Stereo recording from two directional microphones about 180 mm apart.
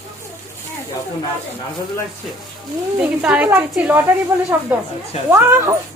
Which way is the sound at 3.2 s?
10° right (ahead or behind).